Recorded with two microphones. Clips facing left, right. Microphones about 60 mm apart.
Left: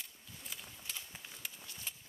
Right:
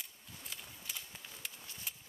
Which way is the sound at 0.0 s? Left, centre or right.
Centre.